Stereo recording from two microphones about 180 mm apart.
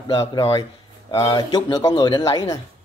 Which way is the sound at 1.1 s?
20° left (ahead or behind).